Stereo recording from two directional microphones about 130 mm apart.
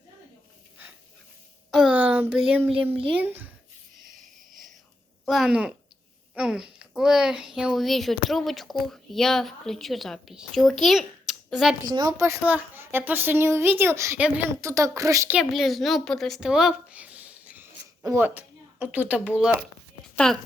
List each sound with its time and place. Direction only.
1.7 s speech: 5° right (ahead or behind)
5.2 s a woman's voice: 5° right (ahead or behind)
11.9 s a woman's voice: 30° right (ahead or behind)
12.5 s speech: 15° right (ahead or behind)
14.2 s speech: 10° right (ahead or behind)
14.6 s a woman's voice: 20° right (ahead or behind)
15.3 s a woman's voice: 5° right (ahead or behind)
20.1 s speech: 5° left (ahead or behind)